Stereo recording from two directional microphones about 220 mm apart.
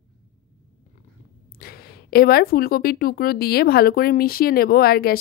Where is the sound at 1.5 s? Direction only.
45° left (ahead or behind).